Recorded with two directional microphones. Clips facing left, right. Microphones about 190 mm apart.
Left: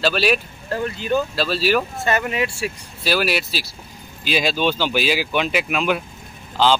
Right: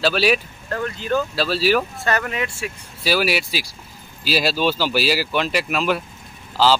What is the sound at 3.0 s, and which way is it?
Speech, 10° right (ahead or behind).